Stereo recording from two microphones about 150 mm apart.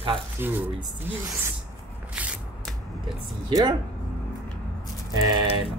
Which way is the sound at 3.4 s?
30° right (ahead or behind).